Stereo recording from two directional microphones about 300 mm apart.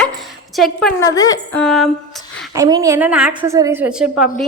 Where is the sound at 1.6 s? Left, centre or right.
Centre.